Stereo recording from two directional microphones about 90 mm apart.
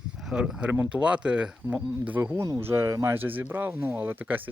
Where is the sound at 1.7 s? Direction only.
20° right (ahead or behind).